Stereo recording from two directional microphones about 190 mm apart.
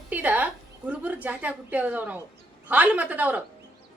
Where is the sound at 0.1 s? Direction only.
10° right (ahead or behind).